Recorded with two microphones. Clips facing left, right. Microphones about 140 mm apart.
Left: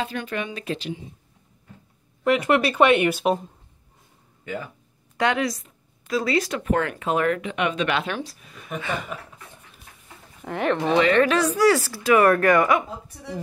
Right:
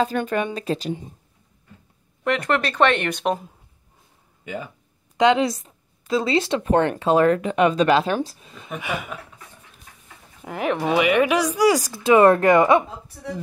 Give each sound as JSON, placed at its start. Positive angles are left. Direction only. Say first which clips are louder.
{"t": 0.0, "sound": "a woman's voice", "louder": "right 6 dB", "side_deg": -45}
{"t": 2.2, "sound": "speech", "louder": "left 2 dB", "side_deg": 5}
{"t": 5.1, "sound": "speech", "louder": "right 5 dB", "side_deg": -20}
{"t": 8.8, "sound": "speech", "louder": "right 1 dB", "side_deg": -5}
{"t": 10.4, "sound": "speech", "louder": "even", "side_deg": -5}